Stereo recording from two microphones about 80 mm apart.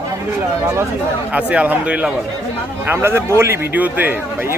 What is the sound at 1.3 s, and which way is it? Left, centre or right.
Speech, centre.